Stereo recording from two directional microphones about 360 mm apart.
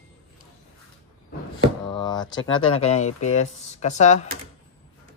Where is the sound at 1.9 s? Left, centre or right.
Centre.